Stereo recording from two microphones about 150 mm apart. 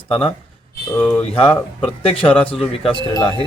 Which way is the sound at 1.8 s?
35° left (ahead or behind).